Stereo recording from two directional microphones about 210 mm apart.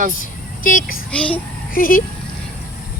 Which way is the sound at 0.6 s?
40° left (ahead or behind).